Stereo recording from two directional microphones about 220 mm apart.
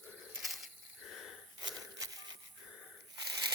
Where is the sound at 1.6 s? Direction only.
20° right (ahead or behind).